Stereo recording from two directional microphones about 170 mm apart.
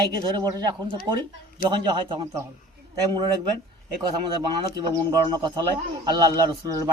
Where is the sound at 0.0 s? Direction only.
25° right (ahead or behind).